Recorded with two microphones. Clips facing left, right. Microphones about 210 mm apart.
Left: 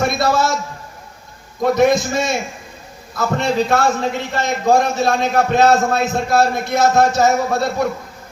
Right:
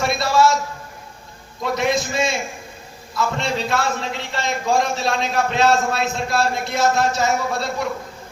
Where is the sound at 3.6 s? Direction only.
55° left (ahead or behind).